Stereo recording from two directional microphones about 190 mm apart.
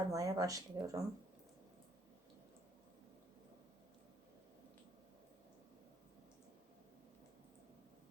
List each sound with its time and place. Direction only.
0.1 s speech: 20° right (ahead or behind)